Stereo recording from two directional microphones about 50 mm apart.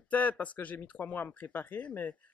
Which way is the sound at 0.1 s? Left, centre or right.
Left.